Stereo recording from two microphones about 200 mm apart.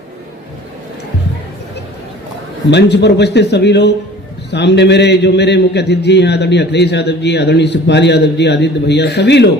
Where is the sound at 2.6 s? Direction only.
60° left (ahead or behind).